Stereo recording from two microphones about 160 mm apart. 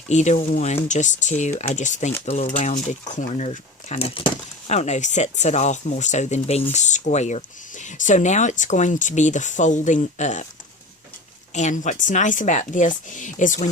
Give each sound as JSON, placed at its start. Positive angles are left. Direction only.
{"t": 0.1, "sound": "speech", "side_deg": 45}
{"t": 11.5, "sound": "speech", "side_deg": 50}